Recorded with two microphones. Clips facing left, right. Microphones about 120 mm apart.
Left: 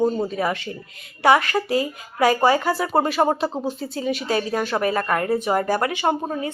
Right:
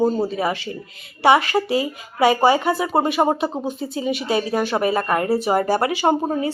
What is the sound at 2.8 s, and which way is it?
Speech, 5° right (ahead or behind).